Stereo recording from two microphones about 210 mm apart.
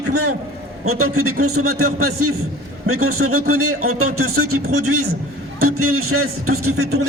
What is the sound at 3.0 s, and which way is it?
Speech, 90° right.